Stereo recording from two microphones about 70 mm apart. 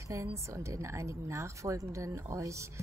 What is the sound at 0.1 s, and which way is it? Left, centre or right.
A woman's voice, right.